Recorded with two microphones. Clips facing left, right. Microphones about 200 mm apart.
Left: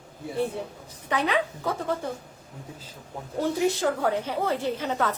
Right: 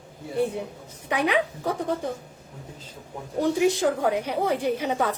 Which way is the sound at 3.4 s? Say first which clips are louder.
Right 3 dB; 15° right (ahead or behind).